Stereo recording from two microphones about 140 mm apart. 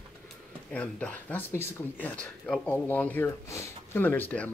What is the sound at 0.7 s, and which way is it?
Speech, 10° left (ahead or behind).